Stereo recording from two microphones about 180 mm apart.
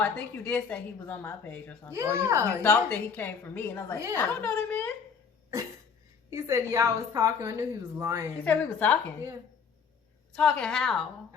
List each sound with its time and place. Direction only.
0.0 s a woman's voice: 10° left (ahead or behind)
1.9 s a woman's voice: 15° right (ahead or behind)
2.6 s a woman's voice: 10° left (ahead or behind)
6.3 s a woman's voice: 15° right (ahead or behind)
8.4 s a woman's voice: 10° left (ahead or behind)
10.3 s a woman's voice: 5° left (ahead or behind)